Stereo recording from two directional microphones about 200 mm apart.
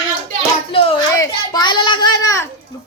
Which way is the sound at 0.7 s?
30° left (ahead or behind).